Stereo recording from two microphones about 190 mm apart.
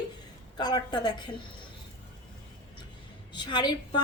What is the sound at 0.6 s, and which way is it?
Speech, 20° left (ahead or behind).